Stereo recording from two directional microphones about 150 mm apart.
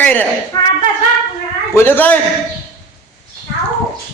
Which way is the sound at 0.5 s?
25° left (ahead or behind).